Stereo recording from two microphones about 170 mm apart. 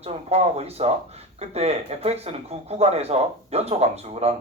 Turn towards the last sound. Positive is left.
turn(degrees=-40)  # may be behind; listen again after turning